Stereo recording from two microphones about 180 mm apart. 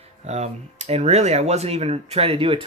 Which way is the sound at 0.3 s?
35° right (ahead or behind).